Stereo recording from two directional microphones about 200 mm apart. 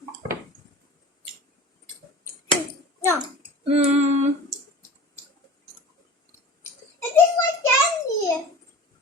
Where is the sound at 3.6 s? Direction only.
30° right (ahead or behind).